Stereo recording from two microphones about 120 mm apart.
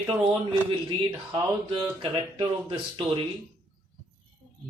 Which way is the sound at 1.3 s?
40° right (ahead or behind).